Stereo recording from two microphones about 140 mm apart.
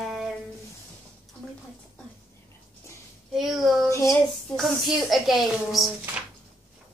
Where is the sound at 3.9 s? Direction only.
25° left (ahead or behind).